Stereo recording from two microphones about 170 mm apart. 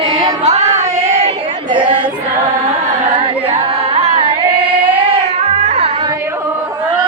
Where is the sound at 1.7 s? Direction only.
30° right (ahead or behind).